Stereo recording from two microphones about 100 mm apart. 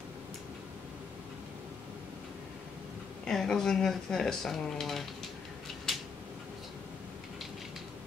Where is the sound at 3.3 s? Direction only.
5° left (ahead or behind).